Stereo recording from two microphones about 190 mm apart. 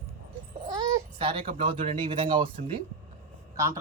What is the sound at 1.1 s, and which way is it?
Speech, 30° right (ahead or behind).